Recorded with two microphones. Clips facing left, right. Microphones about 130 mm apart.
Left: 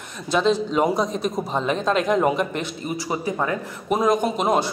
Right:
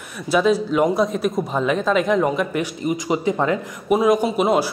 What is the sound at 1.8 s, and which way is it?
Speech, centre (ahead or behind).